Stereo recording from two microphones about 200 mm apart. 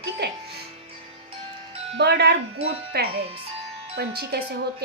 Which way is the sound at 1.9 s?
55° right (ahead or behind).